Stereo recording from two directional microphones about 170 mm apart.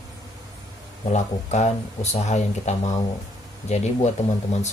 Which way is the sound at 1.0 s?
40° left (ahead or behind).